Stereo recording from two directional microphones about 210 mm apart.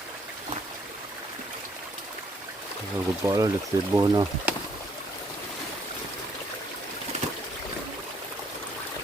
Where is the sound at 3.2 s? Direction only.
15° right (ahead or behind).